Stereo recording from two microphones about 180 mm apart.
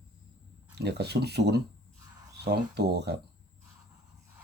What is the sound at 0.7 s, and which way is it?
Speech, 65° right (ahead or behind).